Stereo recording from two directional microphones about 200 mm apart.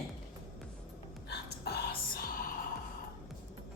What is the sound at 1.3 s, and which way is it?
Whispering, 55° left (ahead or behind).